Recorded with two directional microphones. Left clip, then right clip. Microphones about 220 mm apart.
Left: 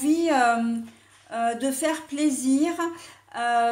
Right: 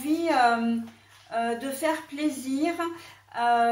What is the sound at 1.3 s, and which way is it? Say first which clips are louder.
Speech: left 3 dB; 50° left (ahead or behind).